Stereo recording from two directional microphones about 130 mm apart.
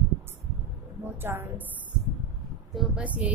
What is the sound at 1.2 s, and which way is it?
Speech, 15° right (ahead or behind).